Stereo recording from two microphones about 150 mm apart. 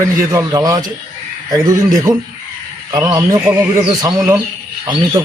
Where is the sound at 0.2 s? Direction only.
20° right (ahead or behind).